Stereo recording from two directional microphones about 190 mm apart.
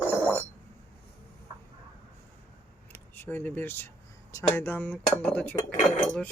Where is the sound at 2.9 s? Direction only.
10° left (ahead or behind).